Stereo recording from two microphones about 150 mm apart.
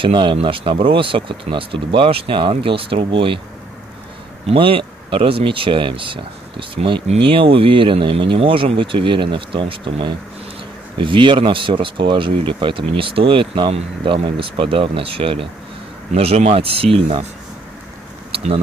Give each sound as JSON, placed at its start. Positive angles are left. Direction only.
{"t": 0.0, "sound": "speech", "side_deg": -30}
{"t": 4.5, "sound": "speech", "side_deg": -35}